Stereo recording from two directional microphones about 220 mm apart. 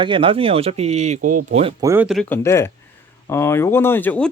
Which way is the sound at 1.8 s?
5° right (ahead or behind).